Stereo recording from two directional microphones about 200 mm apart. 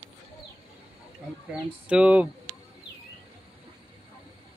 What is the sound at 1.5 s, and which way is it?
Speech, 5° right (ahead or behind).